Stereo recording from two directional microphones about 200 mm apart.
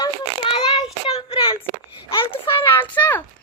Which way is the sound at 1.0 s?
30° left (ahead or behind).